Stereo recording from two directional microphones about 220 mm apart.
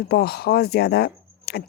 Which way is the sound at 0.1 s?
45° left (ahead or behind).